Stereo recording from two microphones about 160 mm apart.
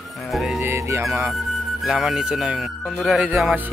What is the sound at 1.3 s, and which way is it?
Speech, centre (ahead or behind).